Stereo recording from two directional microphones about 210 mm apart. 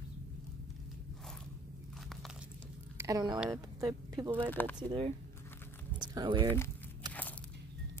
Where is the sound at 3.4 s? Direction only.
15° right (ahead or behind).